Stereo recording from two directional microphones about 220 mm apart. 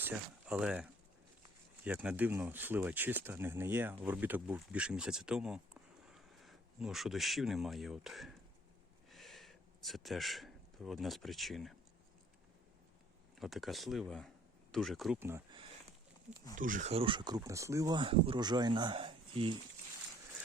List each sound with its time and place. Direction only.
0.0 s a man's voice: 5° right (ahead or behind)
9.0 s a sound: centre (ahead or behind)
13.4 s speech: centre (ahead or behind)
16.6 s speech: 35° right (ahead or behind)